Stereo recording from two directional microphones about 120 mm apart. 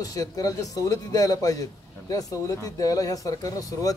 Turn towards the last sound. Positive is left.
turn(degrees=30)  # may be behind; listen again after turning